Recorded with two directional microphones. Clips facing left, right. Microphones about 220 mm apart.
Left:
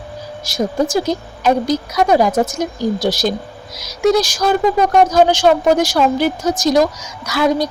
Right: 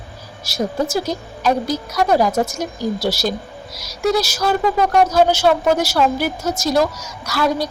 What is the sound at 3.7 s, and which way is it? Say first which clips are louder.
Speech: left 5 dB; centre (ahead or behind).